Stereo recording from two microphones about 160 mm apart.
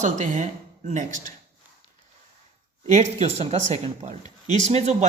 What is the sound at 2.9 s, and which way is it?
Speech, 45° right (ahead or behind).